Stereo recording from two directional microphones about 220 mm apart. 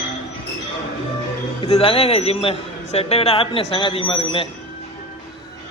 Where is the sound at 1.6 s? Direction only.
25° left (ahead or behind).